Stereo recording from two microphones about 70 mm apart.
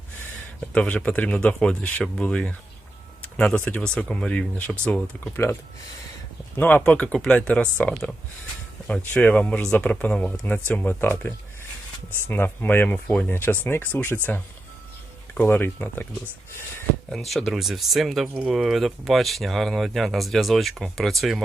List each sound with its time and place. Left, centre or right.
0.7 s speech: centre
6.6 s speech: left
9.1 s speech: centre
12.3 s speech: left
15.4 s speech: left
17.1 s speech: centre